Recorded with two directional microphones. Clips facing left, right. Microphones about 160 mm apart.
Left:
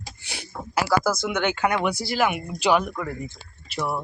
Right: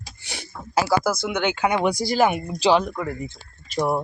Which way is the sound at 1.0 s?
10° right (ahead or behind).